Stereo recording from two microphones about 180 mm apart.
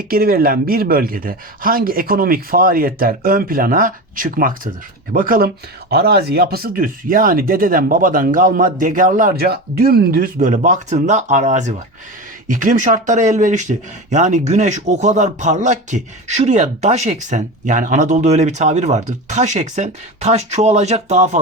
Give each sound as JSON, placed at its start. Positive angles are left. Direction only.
{"t": 0.0, "sound": "speech", "side_deg": -55}